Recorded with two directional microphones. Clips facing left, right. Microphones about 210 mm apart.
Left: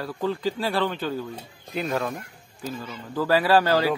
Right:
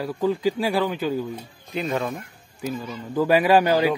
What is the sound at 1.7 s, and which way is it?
Speech, centre (ahead or behind).